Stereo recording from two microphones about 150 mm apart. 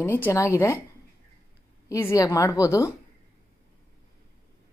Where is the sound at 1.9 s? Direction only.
20° left (ahead or behind).